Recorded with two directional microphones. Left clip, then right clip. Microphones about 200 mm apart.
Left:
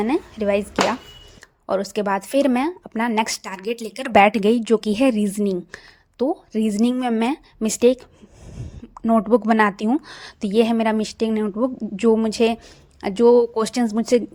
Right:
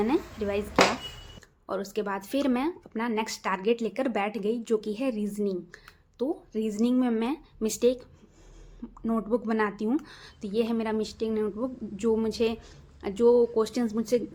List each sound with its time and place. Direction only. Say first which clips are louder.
0.0 s a woman's voice: left 6 dB; 30° left (ahead or behind)